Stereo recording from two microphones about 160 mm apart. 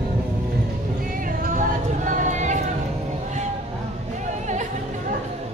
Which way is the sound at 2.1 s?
50° right (ahead or behind).